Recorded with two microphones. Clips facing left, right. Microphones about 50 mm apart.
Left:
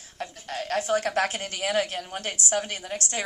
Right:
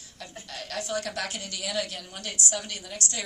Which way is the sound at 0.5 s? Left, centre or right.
Left.